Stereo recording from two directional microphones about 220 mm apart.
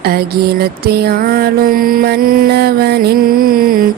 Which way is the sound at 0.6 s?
45° right (ahead or behind).